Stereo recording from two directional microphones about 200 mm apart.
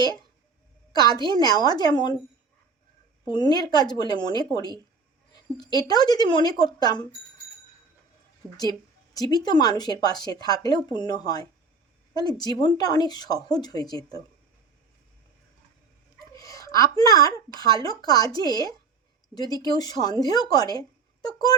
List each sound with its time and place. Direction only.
0.9 s speech: 20° left (ahead or behind)
3.2 s speech: 20° left (ahead or behind)
8.4 s speech: 5° left (ahead or behind)
9.1 s speech: 20° left (ahead or behind)
16.1 s a woman's voice: 15° left (ahead or behind)